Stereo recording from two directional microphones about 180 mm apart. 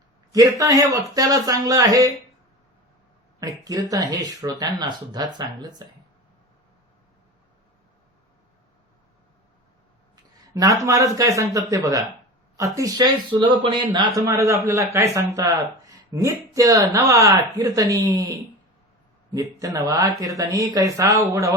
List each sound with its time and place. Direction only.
0.3 s speech: 20° right (ahead or behind)
3.4 s speech: 20° right (ahead or behind)
10.4 s speech: 20° right (ahead or behind)
19.3 s speech: 20° right (ahead or behind)